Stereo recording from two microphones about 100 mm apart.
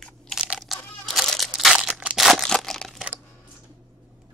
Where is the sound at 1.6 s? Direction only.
5° right (ahead or behind).